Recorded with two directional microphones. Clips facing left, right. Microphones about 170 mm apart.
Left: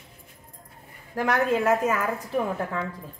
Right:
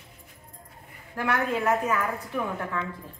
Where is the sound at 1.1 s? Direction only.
35° left (ahead or behind).